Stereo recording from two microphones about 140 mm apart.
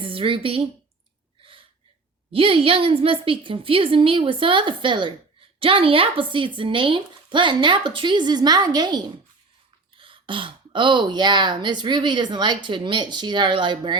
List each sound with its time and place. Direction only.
0.0 s a woman's voice: 40° right (ahead or behind)
2.3 s speech: 40° right (ahead or behind)